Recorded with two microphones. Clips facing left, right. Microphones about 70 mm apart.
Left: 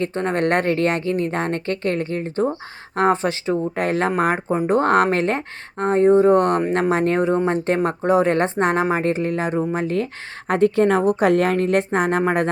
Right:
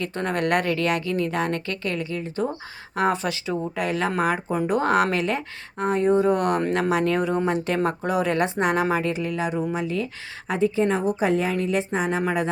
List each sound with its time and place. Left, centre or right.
0.0 s speech: left
10.5 s a woman's voice: left